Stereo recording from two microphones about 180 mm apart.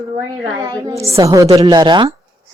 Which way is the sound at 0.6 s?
15° right (ahead or behind).